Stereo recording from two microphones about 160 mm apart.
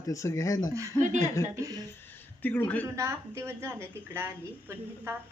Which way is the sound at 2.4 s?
10° left (ahead or behind).